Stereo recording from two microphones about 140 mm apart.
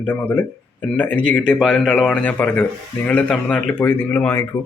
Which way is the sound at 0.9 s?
10° left (ahead or behind).